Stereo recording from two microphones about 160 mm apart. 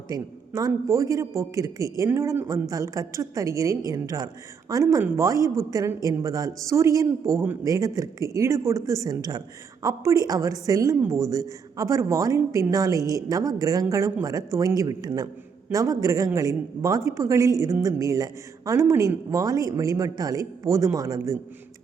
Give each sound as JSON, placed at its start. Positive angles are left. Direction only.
{"t": 0.1, "sound": "a woman's voice", "side_deg": -25}